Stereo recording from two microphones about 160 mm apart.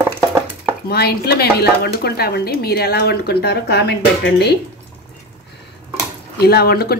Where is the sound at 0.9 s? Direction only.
80° left.